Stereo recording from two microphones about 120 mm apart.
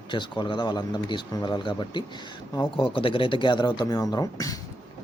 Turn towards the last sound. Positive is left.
turn(degrees=30)  # may be behind; listen again after turning